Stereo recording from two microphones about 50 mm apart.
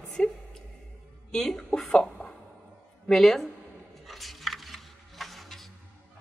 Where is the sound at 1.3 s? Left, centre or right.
Centre.